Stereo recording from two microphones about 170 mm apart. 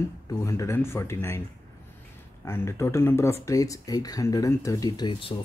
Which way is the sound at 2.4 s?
15° left (ahead or behind).